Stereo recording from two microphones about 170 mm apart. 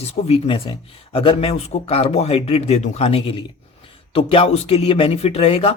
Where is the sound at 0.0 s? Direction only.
35° left (ahead or behind).